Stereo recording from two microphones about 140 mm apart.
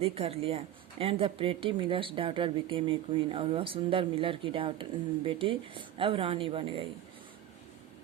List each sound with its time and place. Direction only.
0.0 s a woman's voice: 45° right (ahead or behind)